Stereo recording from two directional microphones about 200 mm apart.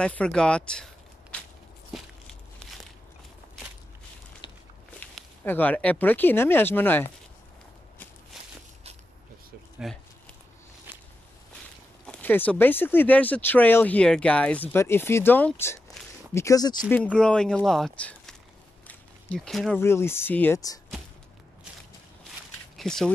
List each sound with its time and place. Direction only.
0.0 s speech: 5° left (ahead or behind)
1.3 s walk: 5° left (ahead or behind)
5.0 s speech: 10° left (ahead or behind)
8.3 s walk: centre (ahead or behind)
9.8 s speech: centre (ahead or behind)
10.9 s walk: 10° right (ahead or behind)
12.1 s speech: 10° left (ahead or behind)
16.9 s speech: 5° left (ahead or behind)
18.9 s a sound: 5° left (ahead or behind)
19.8 s speech: 10° left (ahead or behind)
22.8 s speech: 5° left (ahead or behind)